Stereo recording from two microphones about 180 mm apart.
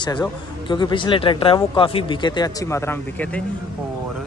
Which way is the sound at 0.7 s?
25° left (ahead or behind).